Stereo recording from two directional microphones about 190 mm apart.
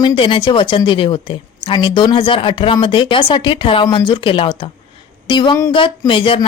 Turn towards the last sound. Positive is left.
turn(degrees=25)  # may be behind; listen again after turning